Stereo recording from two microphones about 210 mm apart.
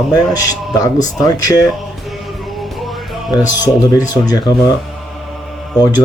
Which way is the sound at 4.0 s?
20° left (ahead or behind).